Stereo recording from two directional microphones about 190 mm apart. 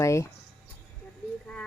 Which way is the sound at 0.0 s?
15° left (ahead or behind).